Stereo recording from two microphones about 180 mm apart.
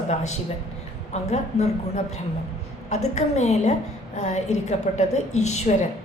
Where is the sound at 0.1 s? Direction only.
40° left (ahead or behind).